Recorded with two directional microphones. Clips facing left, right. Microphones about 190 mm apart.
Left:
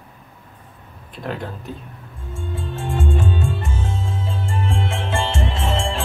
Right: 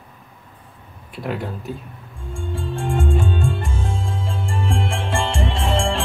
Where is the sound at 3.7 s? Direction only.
30° right (ahead or behind).